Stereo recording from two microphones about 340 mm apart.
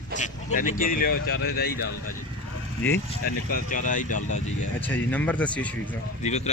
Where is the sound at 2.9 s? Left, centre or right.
Left.